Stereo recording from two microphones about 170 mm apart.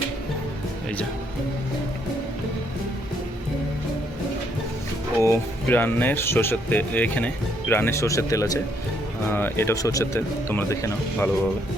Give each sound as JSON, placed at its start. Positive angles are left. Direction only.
{"t": 5.2, "sound": "speech", "side_deg": 15}